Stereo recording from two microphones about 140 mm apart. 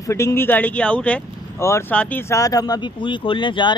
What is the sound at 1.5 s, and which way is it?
Speech, 20° left (ahead or behind).